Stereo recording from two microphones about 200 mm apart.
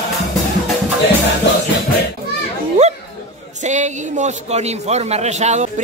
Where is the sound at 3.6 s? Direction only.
35° right (ahead or behind).